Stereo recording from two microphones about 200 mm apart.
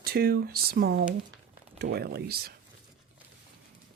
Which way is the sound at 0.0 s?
50° right (ahead or behind).